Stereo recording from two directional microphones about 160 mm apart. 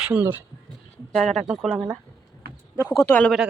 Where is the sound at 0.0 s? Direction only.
10° right (ahead or behind).